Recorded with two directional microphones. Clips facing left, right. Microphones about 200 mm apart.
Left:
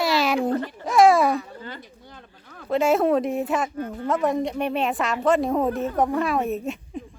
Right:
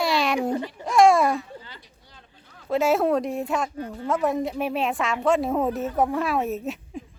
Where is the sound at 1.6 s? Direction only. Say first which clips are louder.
Left 10 dB; 55° left (ahead or behind).